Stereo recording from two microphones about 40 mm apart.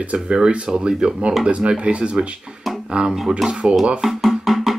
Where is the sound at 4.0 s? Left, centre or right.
Centre.